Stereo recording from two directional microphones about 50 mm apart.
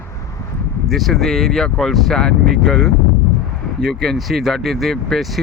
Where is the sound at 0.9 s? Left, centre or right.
Centre.